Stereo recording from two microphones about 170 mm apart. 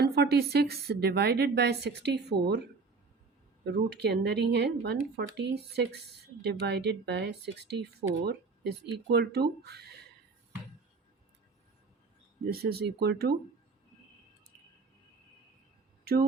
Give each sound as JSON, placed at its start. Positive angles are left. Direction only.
{"t": 0.0, "sound": "speech", "side_deg": -65}
{"t": 3.6, "sound": "speech", "side_deg": -80}
{"t": 12.5, "sound": "speech", "side_deg": -70}